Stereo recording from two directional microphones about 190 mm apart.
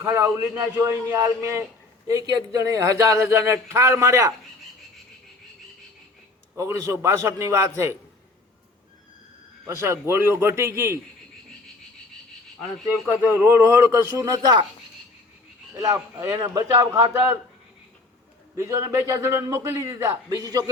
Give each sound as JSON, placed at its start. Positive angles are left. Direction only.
{"t": 0.0, "sound": "a man's voice", "side_deg": -15}
{"t": 6.6, "sound": "a man's voice", "side_deg": -15}
{"t": 9.6, "sound": "a man's voice", "side_deg": -15}
{"t": 12.8, "sound": "a man's voice", "side_deg": -10}
{"t": 15.7, "sound": "a man's voice", "side_deg": -15}
{"t": 18.5, "sound": "a man's voice", "side_deg": -15}